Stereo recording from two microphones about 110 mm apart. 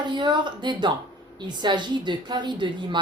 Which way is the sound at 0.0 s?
45° right (ahead or behind).